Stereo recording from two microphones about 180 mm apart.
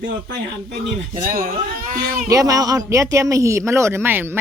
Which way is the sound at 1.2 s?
50° right (ahead or behind).